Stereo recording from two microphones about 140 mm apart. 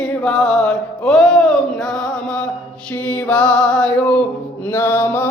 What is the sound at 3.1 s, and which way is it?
Music, 10° left (ahead or behind).